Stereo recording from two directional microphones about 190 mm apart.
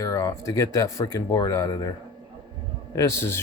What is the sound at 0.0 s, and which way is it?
Speech, 20° left (ahead or behind).